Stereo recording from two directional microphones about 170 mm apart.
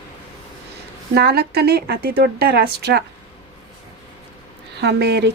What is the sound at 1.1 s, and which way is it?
A woman's voice, 65° right (ahead or behind).